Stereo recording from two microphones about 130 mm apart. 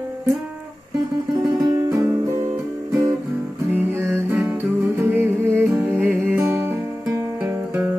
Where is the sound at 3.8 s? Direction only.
20° right (ahead or behind).